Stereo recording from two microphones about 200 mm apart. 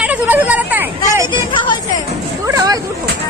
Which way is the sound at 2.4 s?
15° right (ahead or behind).